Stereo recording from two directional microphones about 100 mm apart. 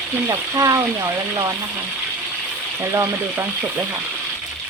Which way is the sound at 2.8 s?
30° right (ahead or behind).